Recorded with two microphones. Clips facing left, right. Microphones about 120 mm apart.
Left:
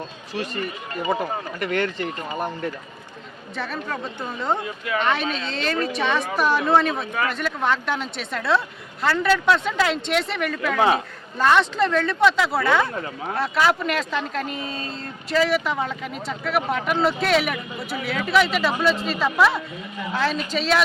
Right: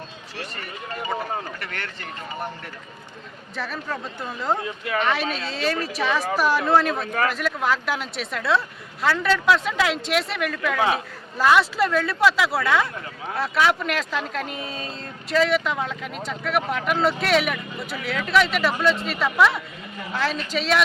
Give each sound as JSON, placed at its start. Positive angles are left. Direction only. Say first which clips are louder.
{"t": 1.1, "sound": "speech", "louder": "left 2 dB", "side_deg": 15}
{"t": 3.5, "sound": "speech", "louder": "left 1 dB", "side_deg": 0}
{"t": 10.8, "sound": "a man's voice", "louder": "left 4 dB", "side_deg": 25}
{"t": 11.3, "sound": "speech", "louder": "even", "side_deg": -5}